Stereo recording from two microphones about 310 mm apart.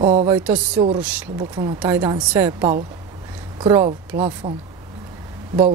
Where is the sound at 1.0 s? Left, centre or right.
Centre.